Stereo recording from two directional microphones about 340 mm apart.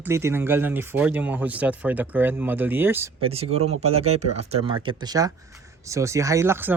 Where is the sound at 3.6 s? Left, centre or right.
Right.